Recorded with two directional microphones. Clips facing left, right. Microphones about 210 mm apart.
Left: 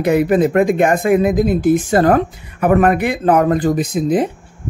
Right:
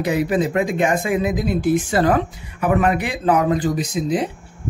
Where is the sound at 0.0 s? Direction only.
55° left (ahead or behind).